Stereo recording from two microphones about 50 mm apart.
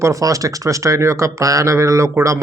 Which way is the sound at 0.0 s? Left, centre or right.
Right.